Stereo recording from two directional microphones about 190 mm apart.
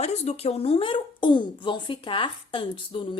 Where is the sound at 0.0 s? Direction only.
35° left (ahead or behind).